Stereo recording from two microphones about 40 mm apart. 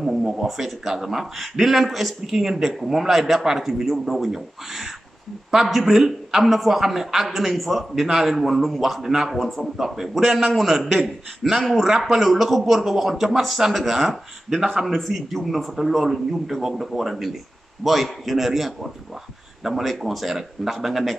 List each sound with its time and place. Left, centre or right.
0.4 s a man's voice: centre